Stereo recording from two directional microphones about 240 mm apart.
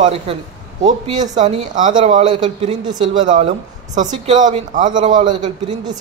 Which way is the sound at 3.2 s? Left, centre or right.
Right.